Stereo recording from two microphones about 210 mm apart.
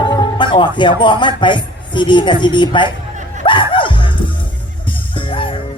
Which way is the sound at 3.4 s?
25° left (ahead or behind).